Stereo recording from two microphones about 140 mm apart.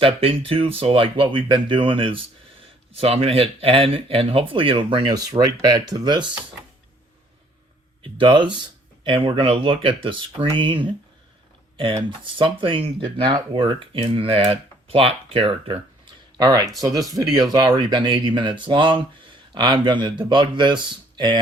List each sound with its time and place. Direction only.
0.0 s speech: 40° right (ahead or behind)
8.0 s speech: 35° right (ahead or behind)
12.2 s speech: 40° right (ahead or behind)
16.4 s speech: 25° right (ahead or behind)